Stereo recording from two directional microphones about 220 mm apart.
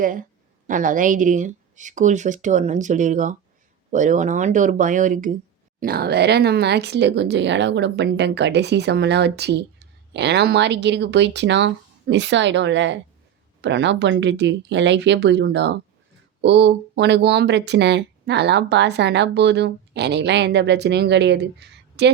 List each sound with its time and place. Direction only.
0.0 s speech: 40° right (ahead or behind)